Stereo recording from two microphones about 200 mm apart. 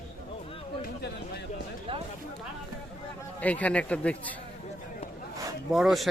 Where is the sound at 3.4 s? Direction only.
5° left (ahead or behind).